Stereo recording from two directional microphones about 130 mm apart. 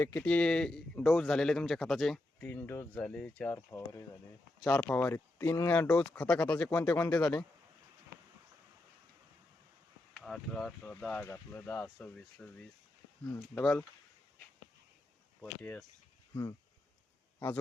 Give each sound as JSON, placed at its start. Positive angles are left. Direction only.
{"t": 0.0, "sound": "speech", "side_deg": 20}
{"t": 0.3, "sound": "a man's voice", "side_deg": 10}
{"t": 2.5, "sound": "speech", "side_deg": 15}
{"t": 6.1, "sound": "speech", "side_deg": 5}
{"t": 10.2, "sound": "speech", "side_deg": 5}
{"t": 13.6, "sound": "speech", "side_deg": 5}
{"t": 15.4, "sound": "speech", "side_deg": 15}
{"t": 16.3, "sound": "speech", "side_deg": 25}